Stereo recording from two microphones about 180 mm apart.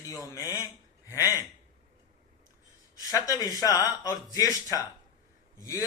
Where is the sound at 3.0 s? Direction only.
20° left (ahead or behind).